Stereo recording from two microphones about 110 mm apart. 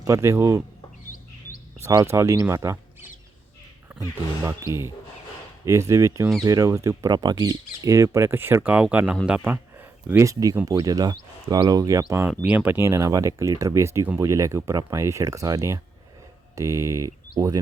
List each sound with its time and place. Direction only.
0.0 s speech: 25° right (ahead or behind)
1.8 s speech: 25° right (ahead or behind)
4.4 s speech: 25° right (ahead or behind)